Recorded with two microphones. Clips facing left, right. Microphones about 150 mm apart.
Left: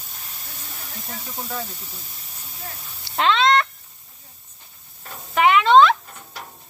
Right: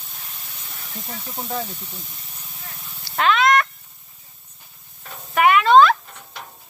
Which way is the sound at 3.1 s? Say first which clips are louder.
Right 1 dB; 25° left (ahead or behind).